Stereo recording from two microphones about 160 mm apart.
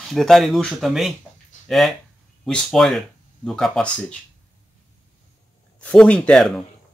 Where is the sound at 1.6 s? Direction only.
Centre (ahead or behind).